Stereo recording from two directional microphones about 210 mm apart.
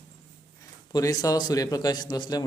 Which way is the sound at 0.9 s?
15° left (ahead or behind).